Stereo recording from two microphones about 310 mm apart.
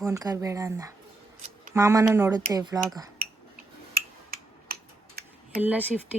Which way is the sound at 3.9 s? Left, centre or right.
Right.